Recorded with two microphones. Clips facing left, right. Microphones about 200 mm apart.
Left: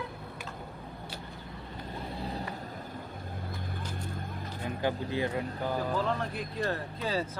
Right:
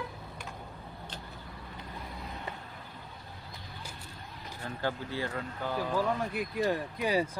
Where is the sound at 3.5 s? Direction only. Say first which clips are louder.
Left 7 dB; 50° left (ahead or behind).